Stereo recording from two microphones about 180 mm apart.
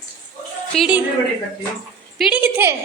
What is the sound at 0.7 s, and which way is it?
Speech, 5° left (ahead or behind).